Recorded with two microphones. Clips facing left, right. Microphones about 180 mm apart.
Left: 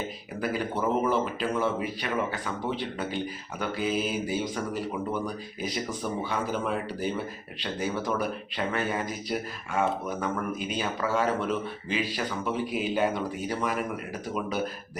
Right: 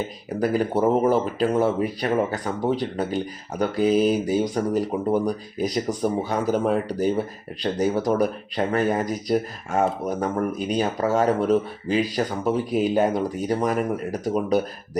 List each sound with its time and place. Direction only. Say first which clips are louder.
0.3 s speech: right 8 dB; 40° right (ahead or behind)